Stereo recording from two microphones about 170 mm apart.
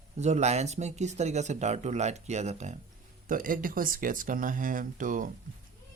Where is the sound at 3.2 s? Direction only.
55° right (ahead or behind).